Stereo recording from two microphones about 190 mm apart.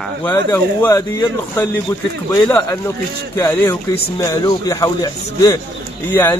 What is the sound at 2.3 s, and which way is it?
Speech, 15° left (ahead or behind).